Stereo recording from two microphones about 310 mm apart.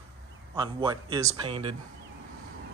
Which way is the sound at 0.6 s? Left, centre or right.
Centre.